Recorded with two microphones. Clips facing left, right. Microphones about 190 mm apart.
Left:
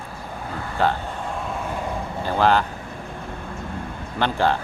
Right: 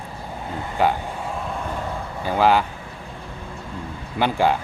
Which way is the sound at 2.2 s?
10° right (ahead or behind).